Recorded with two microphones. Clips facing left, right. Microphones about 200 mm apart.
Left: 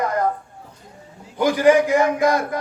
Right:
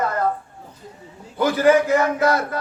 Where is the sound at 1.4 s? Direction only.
15° left (ahead or behind).